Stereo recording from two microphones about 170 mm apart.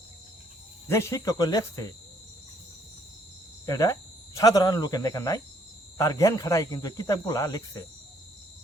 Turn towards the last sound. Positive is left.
turn(degrees=20)  # may be behind; listen again after turning